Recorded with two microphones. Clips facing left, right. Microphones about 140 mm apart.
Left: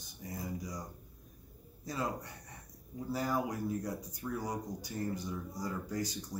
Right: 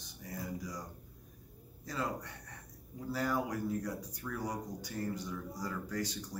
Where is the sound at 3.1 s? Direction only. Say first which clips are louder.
Even; 15° left (ahead or behind).